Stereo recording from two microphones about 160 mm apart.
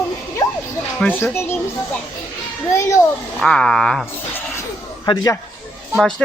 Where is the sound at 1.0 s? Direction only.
15° left (ahead or behind).